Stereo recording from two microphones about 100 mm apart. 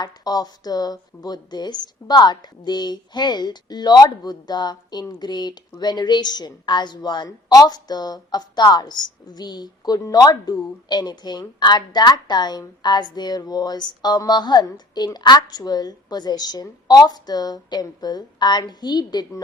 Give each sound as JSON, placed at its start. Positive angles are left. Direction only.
{"t": 0.0, "sound": "speech", "side_deg": 40}